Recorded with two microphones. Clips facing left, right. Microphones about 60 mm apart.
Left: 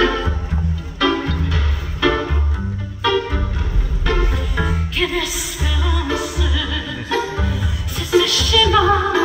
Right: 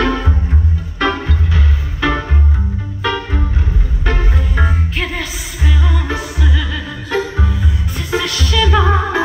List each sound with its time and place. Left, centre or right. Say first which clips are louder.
0.0 s music: right 1 dB; right